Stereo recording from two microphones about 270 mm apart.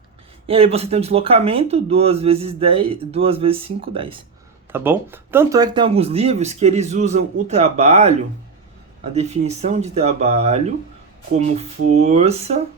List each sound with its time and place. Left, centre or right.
0.4 s speech: right
4.7 s speech: centre; by 8.1 s right
9.1 s speech: right